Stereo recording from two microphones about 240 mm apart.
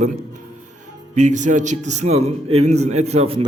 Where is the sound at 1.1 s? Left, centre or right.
Right.